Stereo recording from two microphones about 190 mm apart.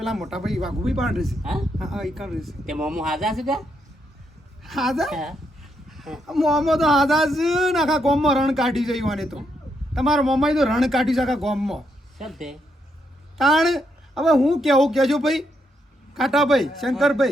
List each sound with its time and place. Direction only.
0.0 s speech: centre (ahead or behind)